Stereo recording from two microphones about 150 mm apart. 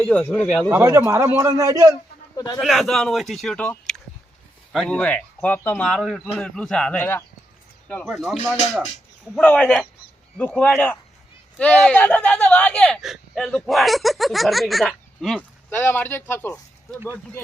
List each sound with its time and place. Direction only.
0.0 s speech: 5° left (ahead or behind)
0.7 s a man's voice: 15° right (ahead or behind)
2.3 s a man's voice: 25° left (ahead or behind)
2.6 s speech: centre (ahead or behind)
8.0 s speech: centre (ahead or behind)
15.7 s speech: 15° left (ahead or behind)